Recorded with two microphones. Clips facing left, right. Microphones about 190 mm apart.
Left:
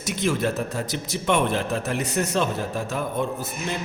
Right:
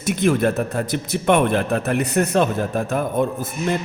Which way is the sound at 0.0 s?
55° right (ahead or behind).